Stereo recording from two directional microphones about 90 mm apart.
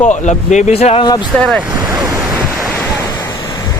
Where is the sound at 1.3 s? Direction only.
10° left (ahead or behind).